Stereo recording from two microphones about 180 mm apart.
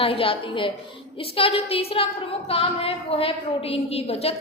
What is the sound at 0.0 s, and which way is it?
A woman's voice, 30° left (ahead or behind).